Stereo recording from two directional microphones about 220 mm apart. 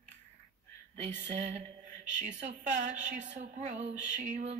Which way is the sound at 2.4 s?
35° right (ahead or behind).